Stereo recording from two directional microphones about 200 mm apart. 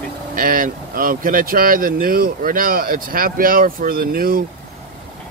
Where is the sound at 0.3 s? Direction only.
45° right (ahead or behind).